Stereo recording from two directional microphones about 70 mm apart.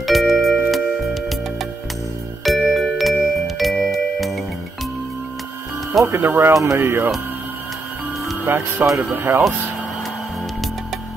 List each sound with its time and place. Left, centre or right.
0.0 s music: centre
2.4 s music: centre
6.0 s speech: right
6.5 s speech: right
8.5 s speech: right